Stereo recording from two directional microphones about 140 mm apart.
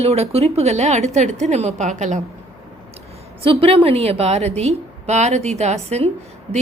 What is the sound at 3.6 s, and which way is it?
A woman's voice, 45° right (ahead or behind).